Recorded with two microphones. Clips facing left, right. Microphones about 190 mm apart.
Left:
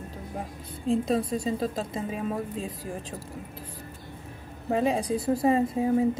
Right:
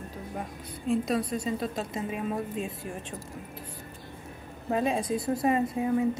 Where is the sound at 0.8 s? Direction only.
30° left (ahead or behind).